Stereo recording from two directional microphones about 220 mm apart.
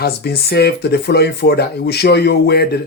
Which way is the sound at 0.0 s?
45° left (ahead or behind).